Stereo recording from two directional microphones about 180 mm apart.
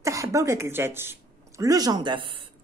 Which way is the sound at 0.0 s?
20° right (ahead or behind).